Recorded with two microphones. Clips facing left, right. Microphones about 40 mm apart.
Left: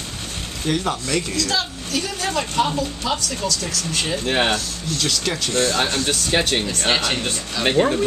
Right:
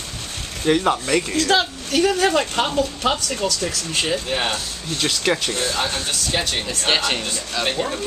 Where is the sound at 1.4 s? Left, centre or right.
Right.